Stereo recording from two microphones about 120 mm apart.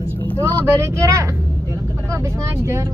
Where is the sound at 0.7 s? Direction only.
25° right (ahead or behind).